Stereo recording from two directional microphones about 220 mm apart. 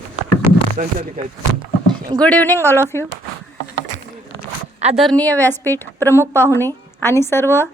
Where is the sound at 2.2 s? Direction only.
5° left (ahead or behind).